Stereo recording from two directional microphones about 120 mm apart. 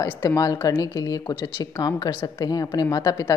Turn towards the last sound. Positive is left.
turn(degrees=30)  # may be behind; listen again after turning